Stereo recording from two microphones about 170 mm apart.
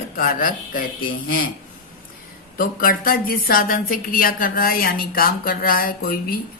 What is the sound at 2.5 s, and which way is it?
Speech, 55° left (ahead or behind).